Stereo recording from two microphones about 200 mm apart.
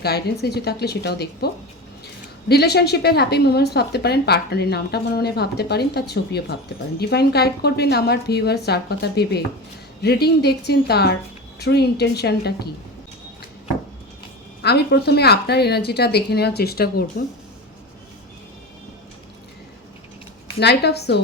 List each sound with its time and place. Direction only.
0.0 s a woman's voice: 55° left (ahead or behind)
2.5 s a woman's voice: 55° left (ahead or behind)
14.6 s a woman's voice: 55° left (ahead or behind)
20.6 s a woman's voice: 55° left (ahead or behind)